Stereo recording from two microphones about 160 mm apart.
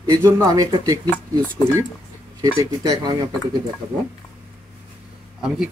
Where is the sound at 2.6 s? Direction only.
20° right (ahead or behind).